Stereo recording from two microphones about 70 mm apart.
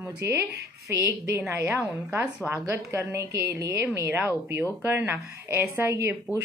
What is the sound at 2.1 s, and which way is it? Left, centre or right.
A woman's voice, right.